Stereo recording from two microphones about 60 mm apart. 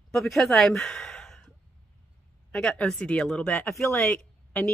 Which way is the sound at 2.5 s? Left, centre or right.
Centre.